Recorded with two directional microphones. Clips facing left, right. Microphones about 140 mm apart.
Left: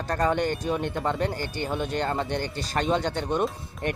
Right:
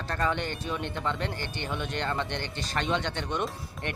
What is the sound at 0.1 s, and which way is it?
Speech, 45° left (ahead or behind).